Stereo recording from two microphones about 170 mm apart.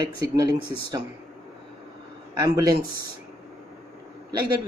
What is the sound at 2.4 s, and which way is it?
Speech, 20° right (ahead or behind).